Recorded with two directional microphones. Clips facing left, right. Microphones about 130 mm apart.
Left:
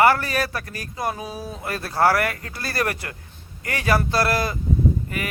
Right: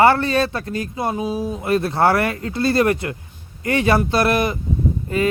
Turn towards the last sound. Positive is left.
turn(degrees=-25)  # may be behind; listen again after turning